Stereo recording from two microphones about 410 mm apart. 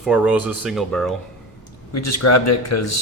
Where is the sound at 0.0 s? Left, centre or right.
Centre.